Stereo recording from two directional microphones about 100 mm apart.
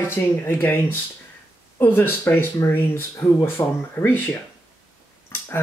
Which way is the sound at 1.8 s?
20° left (ahead or behind).